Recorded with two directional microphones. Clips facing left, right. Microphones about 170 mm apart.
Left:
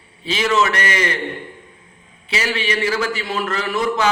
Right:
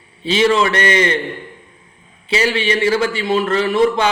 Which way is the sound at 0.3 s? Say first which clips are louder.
Right 4 dB; 30° right (ahead or behind).